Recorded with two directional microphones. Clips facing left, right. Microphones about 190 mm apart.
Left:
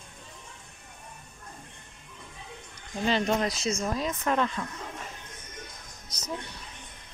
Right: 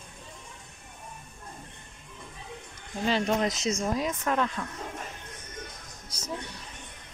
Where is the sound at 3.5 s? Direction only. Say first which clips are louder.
Right 1 dB; 20° right (ahead or behind).